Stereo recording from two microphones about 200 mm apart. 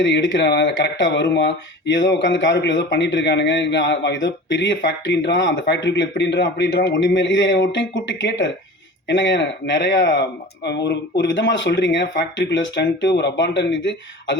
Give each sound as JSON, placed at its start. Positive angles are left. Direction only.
{"t": 0.0, "sound": "speech", "side_deg": 65}